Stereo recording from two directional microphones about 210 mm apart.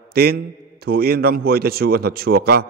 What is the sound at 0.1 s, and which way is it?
A man's voice, 50° right (ahead or behind).